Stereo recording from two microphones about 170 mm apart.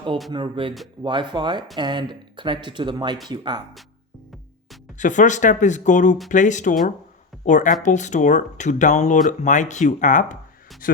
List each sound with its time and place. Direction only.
0.3 s speech: 30° right (ahead or behind)
4.9 s speech: 45° left (ahead or behind)